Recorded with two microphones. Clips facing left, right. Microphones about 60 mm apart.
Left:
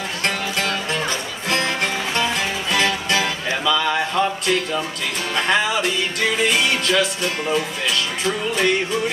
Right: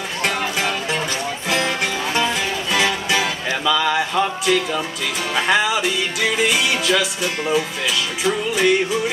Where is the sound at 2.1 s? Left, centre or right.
Centre.